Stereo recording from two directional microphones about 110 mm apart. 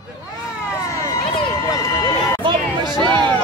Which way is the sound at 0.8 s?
25° left (ahead or behind).